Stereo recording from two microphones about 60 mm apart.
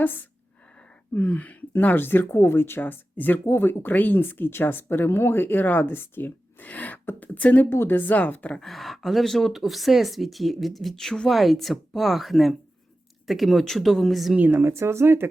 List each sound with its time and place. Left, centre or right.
1.1 s speech: left
8.5 s speech: centre
14.3 s speech: right
14.6 s speech: right